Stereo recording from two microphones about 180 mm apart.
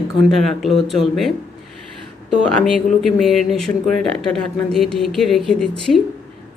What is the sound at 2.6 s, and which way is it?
Speech, centre (ahead or behind).